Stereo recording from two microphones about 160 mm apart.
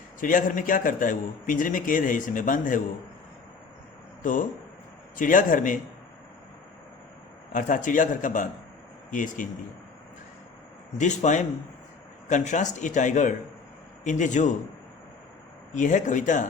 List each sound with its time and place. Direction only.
0.2 s a man's voice: 55° left (ahead or behind)
4.2 s a man's voice: 55° left (ahead or behind)
7.5 s a man's voice: 55° left (ahead or behind)
10.9 s speech: 50° left (ahead or behind)
15.7 s speech: 50° left (ahead or behind)